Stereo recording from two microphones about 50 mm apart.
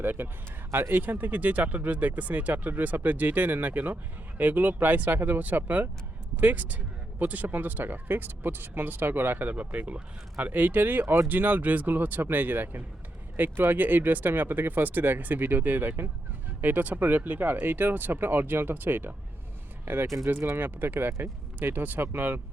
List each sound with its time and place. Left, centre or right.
0.0 s speech: right
20.1 s speech: right
20.6 s speech: right